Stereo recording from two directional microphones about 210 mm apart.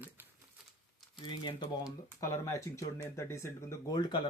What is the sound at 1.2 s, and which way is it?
Speech, 20° left (ahead or behind).